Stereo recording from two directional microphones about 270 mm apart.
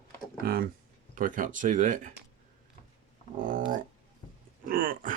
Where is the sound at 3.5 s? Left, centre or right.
Right.